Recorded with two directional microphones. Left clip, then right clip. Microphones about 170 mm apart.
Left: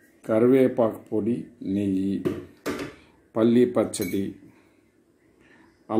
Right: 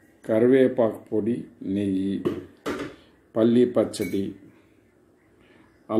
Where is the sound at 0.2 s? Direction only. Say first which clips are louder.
Right 1 dB; 15° left (ahead or behind).